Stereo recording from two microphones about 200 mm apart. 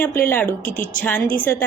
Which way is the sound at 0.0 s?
10° left (ahead or behind).